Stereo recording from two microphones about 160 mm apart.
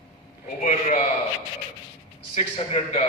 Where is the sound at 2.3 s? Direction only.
40° left (ahead or behind).